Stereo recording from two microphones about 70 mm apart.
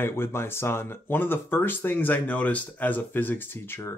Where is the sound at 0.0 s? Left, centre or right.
Left.